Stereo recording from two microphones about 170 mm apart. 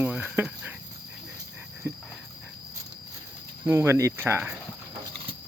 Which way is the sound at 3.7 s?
15° right (ahead or behind).